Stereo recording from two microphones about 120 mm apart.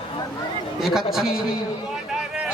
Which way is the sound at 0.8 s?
Centre (ahead or behind).